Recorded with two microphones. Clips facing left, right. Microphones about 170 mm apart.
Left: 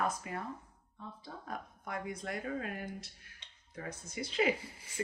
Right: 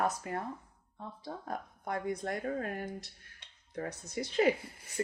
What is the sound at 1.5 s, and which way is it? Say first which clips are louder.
Speech: right 4 dB; 40° right (ahead or behind).